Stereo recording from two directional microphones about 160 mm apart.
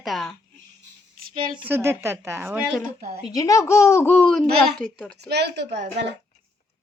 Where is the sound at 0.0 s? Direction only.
Centre (ahead or behind).